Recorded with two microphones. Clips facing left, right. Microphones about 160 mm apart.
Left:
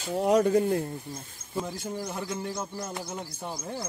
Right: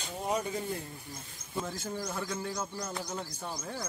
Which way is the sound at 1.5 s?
15° left (ahead or behind).